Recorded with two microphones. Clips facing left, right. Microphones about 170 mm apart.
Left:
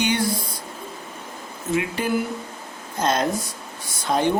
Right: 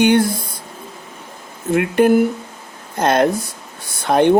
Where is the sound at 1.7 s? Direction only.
60° right (ahead or behind).